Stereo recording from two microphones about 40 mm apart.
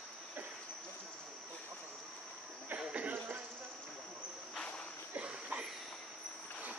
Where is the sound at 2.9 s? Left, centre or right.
Right.